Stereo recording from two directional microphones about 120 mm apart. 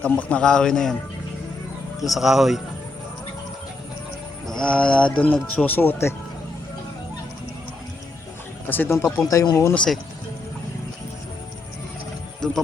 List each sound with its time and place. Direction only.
0.0 s a man's voice: 10° left (ahead or behind)
2.0 s speech: centre (ahead or behind)
4.4 s a man's voice: 5° left (ahead or behind)
8.6 s speech: 15° left (ahead or behind)
9.7 s speech: 5° left (ahead or behind)